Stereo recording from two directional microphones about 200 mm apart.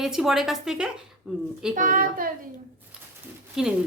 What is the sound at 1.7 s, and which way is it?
Speech, 40° right (ahead or behind).